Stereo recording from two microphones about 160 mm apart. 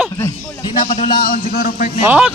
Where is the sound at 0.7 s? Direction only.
55° left (ahead or behind).